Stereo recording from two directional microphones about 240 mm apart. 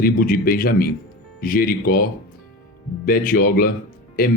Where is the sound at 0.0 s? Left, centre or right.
Left.